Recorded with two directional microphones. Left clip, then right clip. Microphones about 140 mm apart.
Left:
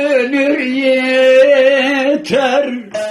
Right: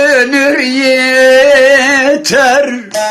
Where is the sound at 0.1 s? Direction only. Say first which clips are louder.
Right 5 dB; 5° left (ahead or behind).